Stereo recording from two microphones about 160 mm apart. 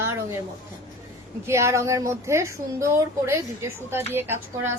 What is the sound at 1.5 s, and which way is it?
A woman's voice, 15° right (ahead or behind).